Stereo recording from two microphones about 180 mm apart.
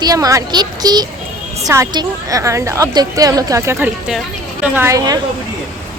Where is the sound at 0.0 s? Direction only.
20° right (ahead or behind).